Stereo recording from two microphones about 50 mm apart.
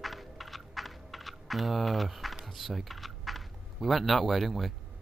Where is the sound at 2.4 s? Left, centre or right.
Centre.